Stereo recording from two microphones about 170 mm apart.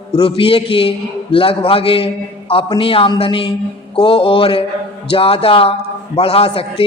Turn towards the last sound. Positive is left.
turn(degrees=35)  # may be behind; listen again after turning